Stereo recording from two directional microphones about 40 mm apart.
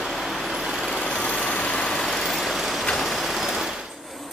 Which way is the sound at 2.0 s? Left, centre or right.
Centre.